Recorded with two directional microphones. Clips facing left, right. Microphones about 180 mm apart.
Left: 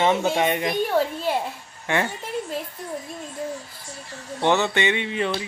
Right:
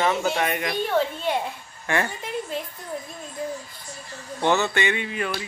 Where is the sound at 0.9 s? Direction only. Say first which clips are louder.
Left 1 dB; 5° left (ahead or behind).